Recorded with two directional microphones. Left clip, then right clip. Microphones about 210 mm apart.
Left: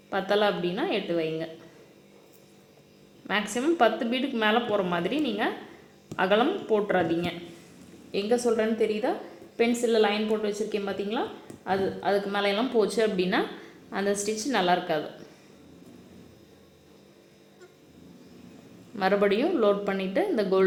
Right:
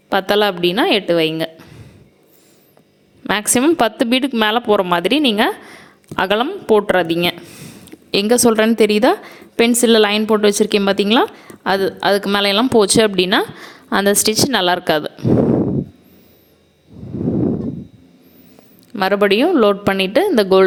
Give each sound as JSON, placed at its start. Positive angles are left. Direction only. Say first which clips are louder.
{"t": 0.1, "sound": "a woman's voice", "louder": "right 10 dB", "side_deg": -45}
{"t": 3.2, "sound": "a woman's voice", "louder": "right 11 dB", "side_deg": -55}
{"t": 18.9, "sound": "a woman's voice", "louder": "right 10 dB", "side_deg": -40}